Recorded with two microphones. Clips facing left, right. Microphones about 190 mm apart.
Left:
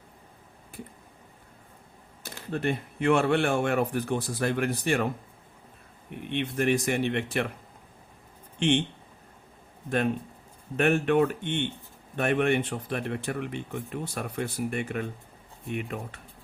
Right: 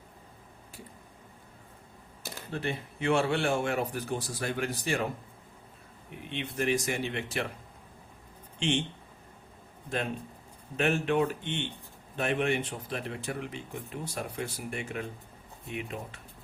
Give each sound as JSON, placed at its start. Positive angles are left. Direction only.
{"t": 2.5, "sound": "speech", "side_deg": 50}
{"t": 6.2, "sound": "speech", "side_deg": 60}
{"t": 8.5, "sound": "speech", "side_deg": 60}
{"t": 10.8, "sound": "speech", "side_deg": 55}